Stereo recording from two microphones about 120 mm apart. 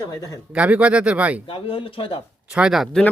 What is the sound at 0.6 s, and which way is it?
Speech, 10° right (ahead or behind).